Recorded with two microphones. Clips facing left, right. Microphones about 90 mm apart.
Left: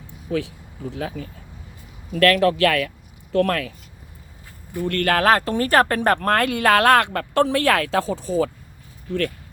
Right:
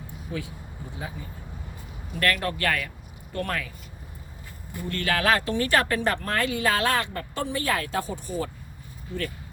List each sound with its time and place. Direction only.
0.3 s speech: 90° left
4.9 s speech: 55° left (ahead or behind); by 8.2 s 90° left